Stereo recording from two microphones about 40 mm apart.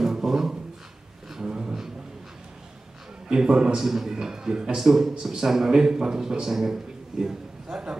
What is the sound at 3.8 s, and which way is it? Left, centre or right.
A man's voice, centre.